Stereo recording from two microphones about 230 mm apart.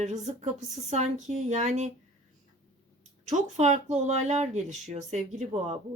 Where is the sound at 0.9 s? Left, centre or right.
Right.